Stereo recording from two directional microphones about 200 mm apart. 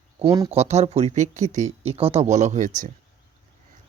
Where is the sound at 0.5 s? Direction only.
30° right (ahead or behind).